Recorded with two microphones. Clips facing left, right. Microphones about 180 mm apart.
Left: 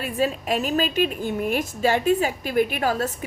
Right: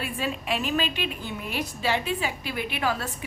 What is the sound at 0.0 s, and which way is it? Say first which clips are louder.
A woman's voice: left 6 dB; 40° left (ahead or behind).